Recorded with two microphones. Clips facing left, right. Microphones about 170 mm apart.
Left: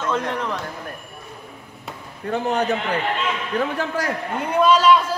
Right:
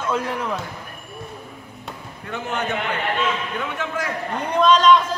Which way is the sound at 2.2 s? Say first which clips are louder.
Left 5 dB; 35° left (ahead or behind).